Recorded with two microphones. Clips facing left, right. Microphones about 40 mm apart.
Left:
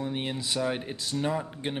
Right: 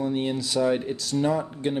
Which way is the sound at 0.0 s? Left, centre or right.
Centre.